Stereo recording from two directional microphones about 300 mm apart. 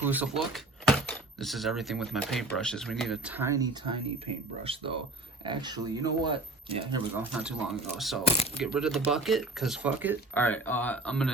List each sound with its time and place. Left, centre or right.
0.0 s speech: centre
7.2 s speech: centre
10.3 s speech: centre